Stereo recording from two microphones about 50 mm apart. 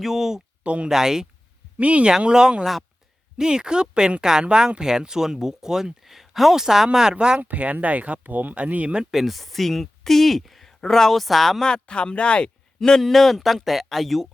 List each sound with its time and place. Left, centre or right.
0.0 s speech: centre
0.6 s speech: right
0.9 s speech: centre
1.8 s speech: right
7.4 s speech: right
9.0 s speech: centre
11.6 s speech: centre